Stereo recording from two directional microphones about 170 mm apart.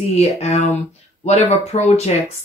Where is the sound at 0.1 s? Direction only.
40° left (ahead or behind).